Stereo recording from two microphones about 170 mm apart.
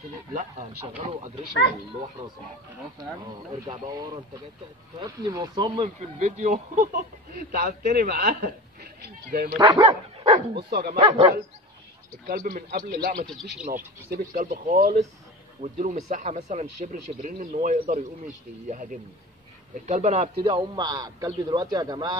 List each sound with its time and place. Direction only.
0.3 s speech: 45° right (ahead or behind)
3.5 s a man's voice: 25° right (ahead or behind)
5.9 s speech: 45° right (ahead or behind); by 9.6 s 60° right (ahead or behind)
9.6 s speech: 25° right (ahead or behind)
10.7 s speech: 70° right (ahead or behind)
11.0 s a man's voice: 30° right (ahead or behind)
12.3 s speech: 55° right (ahead or behind)
13.4 s speech: centre (ahead or behind)
14.1 s speech: 55° right (ahead or behind)
15.6 s a man's voice: 40° right (ahead or behind); by 22.1 s 25° right (ahead or behind)